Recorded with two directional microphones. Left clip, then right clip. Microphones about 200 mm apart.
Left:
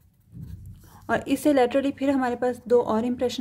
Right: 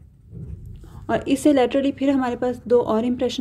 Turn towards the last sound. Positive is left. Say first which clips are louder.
# right 3 dB
turn(degrees=10)  # may be behind; listen again after turning